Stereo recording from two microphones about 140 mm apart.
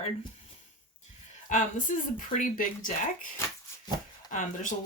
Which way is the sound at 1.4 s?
65° left (ahead or behind).